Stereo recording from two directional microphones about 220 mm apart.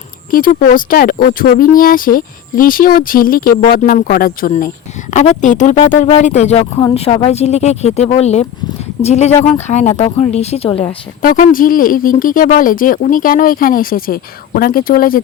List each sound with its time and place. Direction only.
0.3 s speech: 40° left (ahead or behind)
11.2 s speech: 40° left (ahead or behind)